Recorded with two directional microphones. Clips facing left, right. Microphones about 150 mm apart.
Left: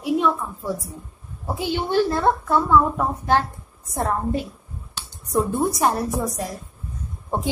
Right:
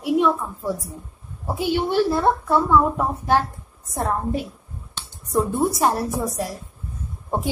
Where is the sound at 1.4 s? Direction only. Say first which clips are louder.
Right 3 dB; 5° right (ahead or behind).